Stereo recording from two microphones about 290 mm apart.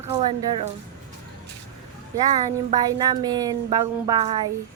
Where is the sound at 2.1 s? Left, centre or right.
Centre.